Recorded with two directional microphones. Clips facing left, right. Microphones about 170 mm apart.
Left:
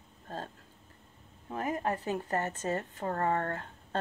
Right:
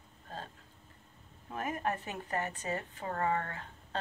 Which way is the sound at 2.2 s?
45° left (ahead or behind).